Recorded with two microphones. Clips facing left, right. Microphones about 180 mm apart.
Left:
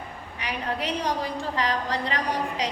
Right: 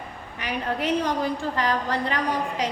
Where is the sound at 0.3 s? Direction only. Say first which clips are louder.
Right 2 dB; 50° right (ahead or behind).